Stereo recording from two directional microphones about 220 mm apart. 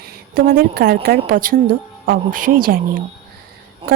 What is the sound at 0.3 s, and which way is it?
Speech, 45° right (ahead or behind).